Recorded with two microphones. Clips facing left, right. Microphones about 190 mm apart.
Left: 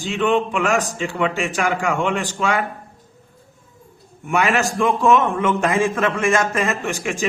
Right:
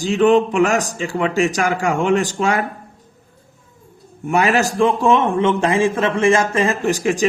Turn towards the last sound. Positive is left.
turn(degrees=-40)  # may be behind; listen again after turning